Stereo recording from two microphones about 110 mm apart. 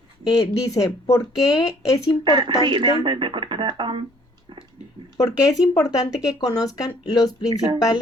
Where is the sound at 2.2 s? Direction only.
45° right (ahead or behind).